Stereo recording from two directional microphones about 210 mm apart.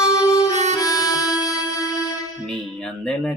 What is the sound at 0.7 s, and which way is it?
Music, 15° left (ahead or behind).